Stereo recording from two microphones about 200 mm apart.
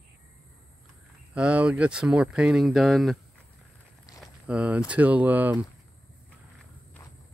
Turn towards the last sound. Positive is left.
turn(degrees=-10)  # may be behind; listen again after turning